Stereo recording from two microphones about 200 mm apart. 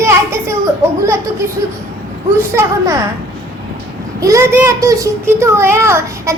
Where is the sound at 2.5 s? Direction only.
15° right (ahead or behind).